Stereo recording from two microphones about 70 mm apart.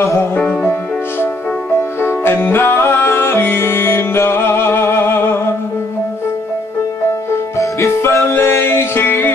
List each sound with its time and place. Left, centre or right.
0.4 s music: left
2.0 s music: left
7.5 s music: left